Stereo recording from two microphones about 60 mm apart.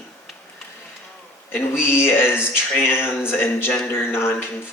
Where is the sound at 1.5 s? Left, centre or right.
Left.